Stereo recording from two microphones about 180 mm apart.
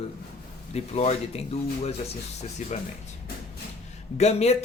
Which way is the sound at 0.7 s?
35° left (ahead or behind).